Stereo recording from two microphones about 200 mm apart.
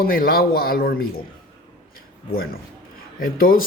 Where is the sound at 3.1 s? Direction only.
45° left (ahead or behind).